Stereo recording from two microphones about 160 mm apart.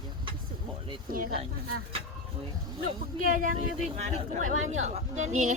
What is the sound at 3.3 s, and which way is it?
Speech, 60° right (ahead or behind).